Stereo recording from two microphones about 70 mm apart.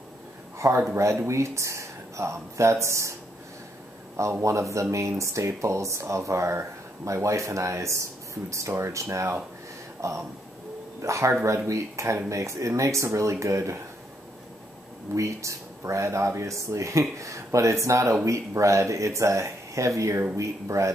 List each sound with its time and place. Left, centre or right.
0.6 s a man's voice: right
4.2 s speech: right
15.1 s speech: right